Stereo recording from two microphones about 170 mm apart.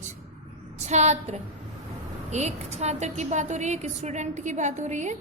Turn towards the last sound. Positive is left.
turn(degrees=-45)  # may be behind; listen again after turning